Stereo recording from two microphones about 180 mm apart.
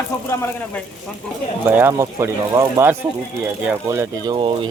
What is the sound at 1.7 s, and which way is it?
Speech, 10° right (ahead or behind).